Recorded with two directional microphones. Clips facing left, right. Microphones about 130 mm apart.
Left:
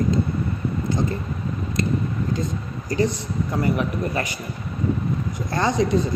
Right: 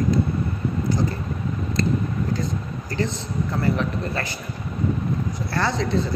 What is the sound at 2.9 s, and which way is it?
A man's voice, 15° left (ahead or behind).